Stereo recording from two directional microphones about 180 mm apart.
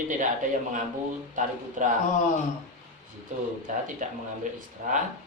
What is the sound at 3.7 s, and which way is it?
A man's voice, 45° right (ahead or behind).